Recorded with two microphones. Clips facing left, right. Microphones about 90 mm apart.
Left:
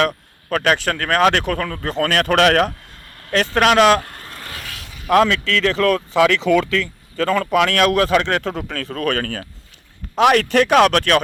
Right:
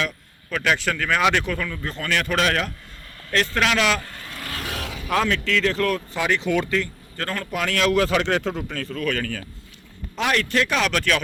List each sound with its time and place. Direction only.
0.0 s speech: 55° left (ahead or behind)
5.0 s speech: 75° left (ahead or behind)
7.5 s speech: 70° left (ahead or behind)